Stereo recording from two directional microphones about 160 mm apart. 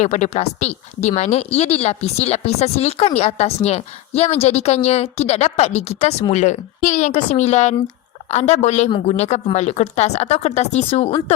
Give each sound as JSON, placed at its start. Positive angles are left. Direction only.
{"t": 0.0, "sound": "a woman's voice", "side_deg": 45}